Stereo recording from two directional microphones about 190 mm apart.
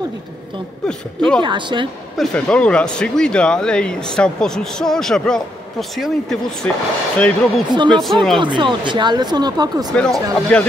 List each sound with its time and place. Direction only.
0.8 s speech: 5° left (ahead or behind)
1.4 s speech: 25° right (ahead or behind)
2.1 s speech: 5° left (ahead or behind)
8.4 s speech: 25° right (ahead or behind)
9.9 s speech: 5° left (ahead or behind)